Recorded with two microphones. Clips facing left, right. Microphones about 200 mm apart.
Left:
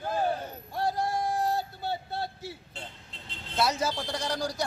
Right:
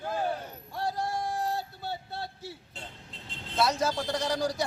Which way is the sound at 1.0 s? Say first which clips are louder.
Left 3 dB; 20° left (ahead or behind).